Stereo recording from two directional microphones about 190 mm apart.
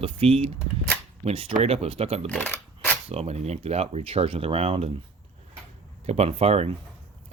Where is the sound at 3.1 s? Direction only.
35° right (ahead or behind).